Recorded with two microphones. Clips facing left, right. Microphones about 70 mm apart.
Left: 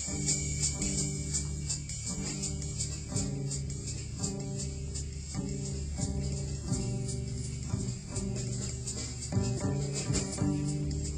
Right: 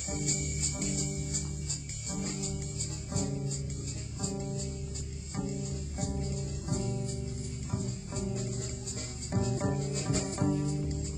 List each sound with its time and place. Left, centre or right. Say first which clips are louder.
0.1 s music: right 2 dB; right
1.0 s music: right 1 dB; centre
2.0 s music: right 3 dB; right